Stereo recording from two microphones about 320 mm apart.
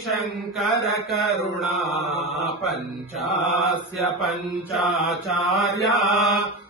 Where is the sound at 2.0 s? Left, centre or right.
Centre.